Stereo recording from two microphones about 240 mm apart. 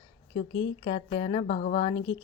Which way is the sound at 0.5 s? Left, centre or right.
Left.